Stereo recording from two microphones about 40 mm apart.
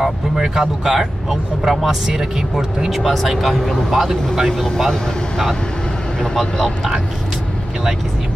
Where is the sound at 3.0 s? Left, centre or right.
Centre.